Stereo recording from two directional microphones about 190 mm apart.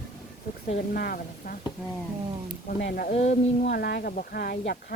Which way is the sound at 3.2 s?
40° left (ahead or behind).